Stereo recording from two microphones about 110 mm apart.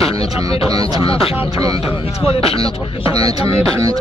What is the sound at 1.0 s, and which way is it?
Speech, 60° left (ahead or behind).